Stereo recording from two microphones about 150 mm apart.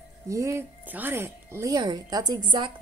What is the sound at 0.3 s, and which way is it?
Speech, 20° right (ahead or behind).